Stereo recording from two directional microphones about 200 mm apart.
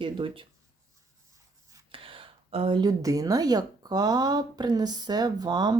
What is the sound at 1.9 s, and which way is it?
Speech, 25° right (ahead or behind).